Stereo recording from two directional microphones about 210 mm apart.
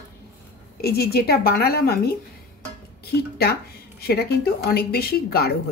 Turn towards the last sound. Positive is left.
turn(degrees=45)  # may be behind; listen again after turning